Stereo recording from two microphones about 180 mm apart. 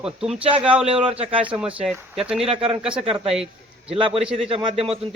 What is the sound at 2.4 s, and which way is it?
Speech, 30° right (ahead or behind).